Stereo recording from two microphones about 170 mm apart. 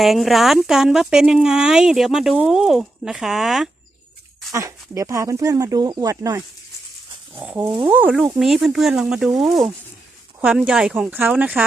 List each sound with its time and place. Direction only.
0.0 s speech: centre (ahead or behind)
4.5 s speech: 20° right (ahead or behind)
7.3 s speech: 10° right (ahead or behind)
7.6 s speech: 30° right (ahead or behind)
7.9 s speech: 10° right (ahead or behind)